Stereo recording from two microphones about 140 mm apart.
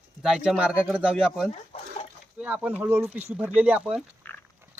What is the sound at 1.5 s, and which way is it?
Chicken, 50° left (ahead or behind).